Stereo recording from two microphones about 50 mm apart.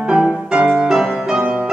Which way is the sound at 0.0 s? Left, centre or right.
Centre.